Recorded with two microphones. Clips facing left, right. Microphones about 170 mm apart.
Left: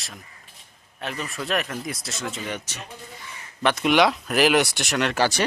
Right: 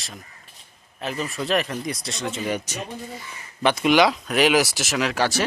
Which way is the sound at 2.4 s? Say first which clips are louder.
Right 6 dB; 10° right (ahead or behind).